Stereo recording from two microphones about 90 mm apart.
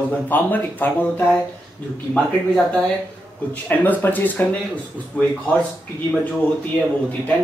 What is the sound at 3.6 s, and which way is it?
Speech, 20° left (ahead or behind).